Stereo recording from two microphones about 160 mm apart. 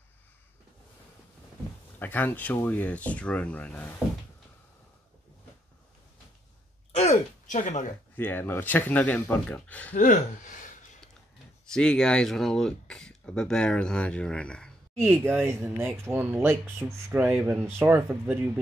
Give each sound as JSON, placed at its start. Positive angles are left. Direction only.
{"t": 2.0, "sound": "speech", "side_deg": 10}
{"t": 7.0, "sound": "a sound", "side_deg": 45}
{"t": 8.2, "sound": "speech", "side_deg": 15}
{"t": 9.9, "sound": "speech", "side_deg": 50}
{"t": 11.6, "sound": "speech", "side_deg": 5}
{"t": 15.0, "sound": "speech", "side_deg": -15}